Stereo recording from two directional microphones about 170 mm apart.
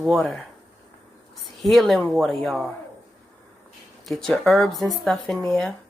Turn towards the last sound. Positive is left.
turn(degrees=0)  # may be behind; listen again after turning